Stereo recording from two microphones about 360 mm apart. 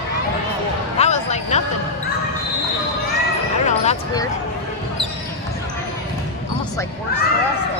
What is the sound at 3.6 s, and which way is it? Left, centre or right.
Speech, centre.